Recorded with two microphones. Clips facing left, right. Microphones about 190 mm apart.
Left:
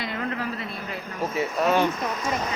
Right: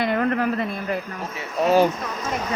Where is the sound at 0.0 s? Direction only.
55° right (ahead or behind).